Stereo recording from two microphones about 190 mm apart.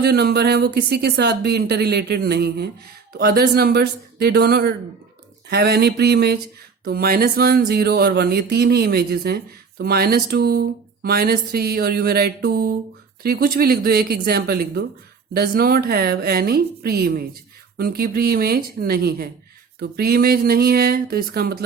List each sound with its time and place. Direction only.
0.0 s speech: 55° right (ahead or behind)